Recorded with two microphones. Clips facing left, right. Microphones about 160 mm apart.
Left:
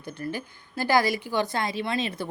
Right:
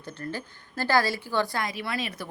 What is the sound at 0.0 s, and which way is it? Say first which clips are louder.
A woman's voice: left 2 dB; 15° left (ahead or behind).